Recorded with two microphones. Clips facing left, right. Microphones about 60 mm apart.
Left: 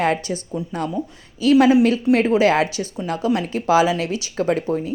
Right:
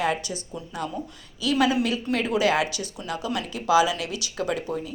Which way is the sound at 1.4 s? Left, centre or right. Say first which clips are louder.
Left 9 dB; left.